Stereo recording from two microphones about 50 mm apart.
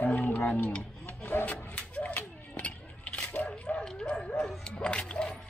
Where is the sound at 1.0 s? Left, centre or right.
Left.